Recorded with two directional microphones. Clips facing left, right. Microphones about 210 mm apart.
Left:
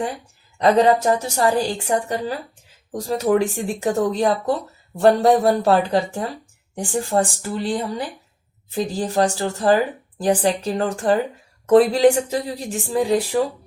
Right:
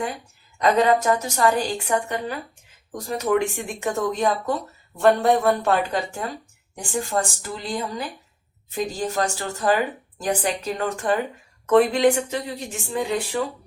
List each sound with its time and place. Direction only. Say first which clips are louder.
0.6 s a woman's voice: left 3 dB; 35° left (ahead or behind)